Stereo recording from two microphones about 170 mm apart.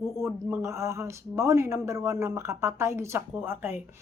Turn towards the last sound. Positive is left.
turn(degrees=-15)  # may be behind; listen again after turning